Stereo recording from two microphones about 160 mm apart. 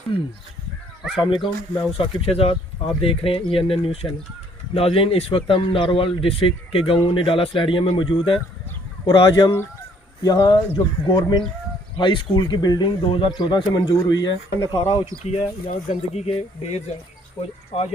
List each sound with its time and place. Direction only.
0.1 s speech: 35° left (ahead or behind)
15.6 s speech: 45° left (ahead or behind)